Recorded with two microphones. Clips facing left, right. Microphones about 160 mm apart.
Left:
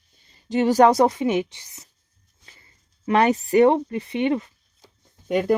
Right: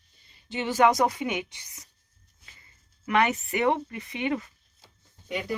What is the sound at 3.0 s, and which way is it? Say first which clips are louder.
Speech: left 6 dB; 35° left (ahead or behind).